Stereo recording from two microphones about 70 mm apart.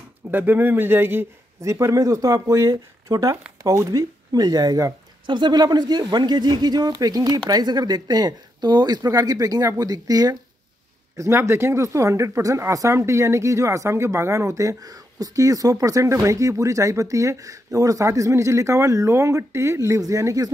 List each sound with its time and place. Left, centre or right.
0.3 s speech: right
1.6 s speech: right
4.3 s speech: right
5.3 s speech: right
11.1 s speech: right